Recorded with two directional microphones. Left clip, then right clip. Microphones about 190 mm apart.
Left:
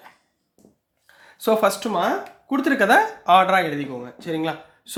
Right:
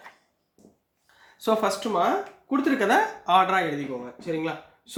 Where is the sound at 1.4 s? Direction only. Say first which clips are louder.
Left 5 dB; 40° left (ahead or behind).